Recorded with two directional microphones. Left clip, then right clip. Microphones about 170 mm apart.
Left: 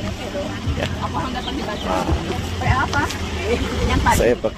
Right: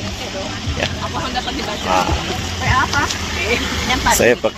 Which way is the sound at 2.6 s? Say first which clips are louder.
Right 4 dB; 25° left (ahead or behind).